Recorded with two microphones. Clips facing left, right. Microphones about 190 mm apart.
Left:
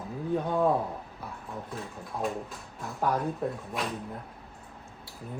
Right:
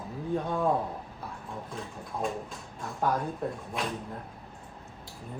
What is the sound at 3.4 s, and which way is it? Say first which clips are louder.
Speech: left 2 dB; 5° left (ahead or behind).